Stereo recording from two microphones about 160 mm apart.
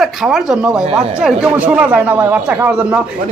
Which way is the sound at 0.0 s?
Centre (ahead or behind).